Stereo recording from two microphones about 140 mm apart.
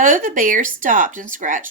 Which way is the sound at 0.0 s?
70° right (ahead or behind).